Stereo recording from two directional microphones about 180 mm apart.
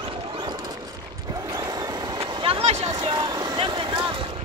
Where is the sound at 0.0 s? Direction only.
30° right (ahead or behind).